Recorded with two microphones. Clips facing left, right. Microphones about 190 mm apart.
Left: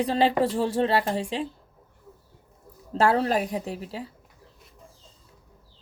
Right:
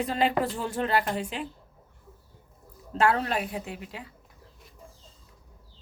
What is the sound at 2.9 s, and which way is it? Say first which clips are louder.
A woman's voice: left 3 dB; 35° left (ahead or behind).